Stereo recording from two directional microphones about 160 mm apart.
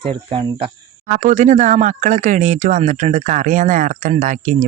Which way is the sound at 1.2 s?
50° right (ahead or behind).